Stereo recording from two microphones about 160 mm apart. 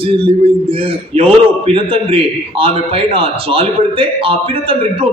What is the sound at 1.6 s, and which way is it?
A man's voice, 35° right (ahead or behind).